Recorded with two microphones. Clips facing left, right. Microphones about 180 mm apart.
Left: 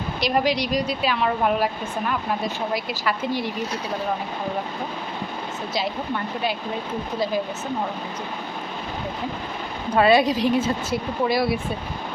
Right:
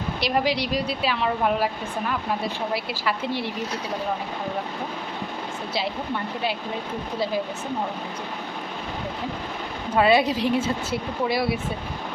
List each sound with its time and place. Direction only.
0.2 s a woman's voice: 25° right (ahead or behind)
2.9 s a woman's voice: 30° right (ahead or behind)
10.0 s a woman's voice: 20° right (ahead or behind)
10.3 s a woman's voice: 25° left (ahead or behind)
11.3 s a woman's voice: 25° right (ahead or behind)